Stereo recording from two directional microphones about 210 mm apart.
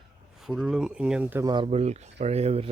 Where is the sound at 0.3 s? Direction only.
Centre (ahead or behind).